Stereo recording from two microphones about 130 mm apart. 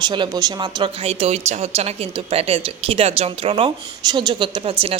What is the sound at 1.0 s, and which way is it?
A woman's voice, 55° right (ahead or behind).